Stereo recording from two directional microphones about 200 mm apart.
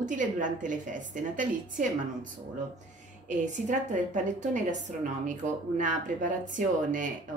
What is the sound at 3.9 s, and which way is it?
Speech, 40° right (ahead or behind).